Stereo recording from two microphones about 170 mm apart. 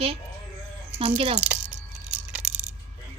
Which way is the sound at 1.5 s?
10° right (ahead or behind).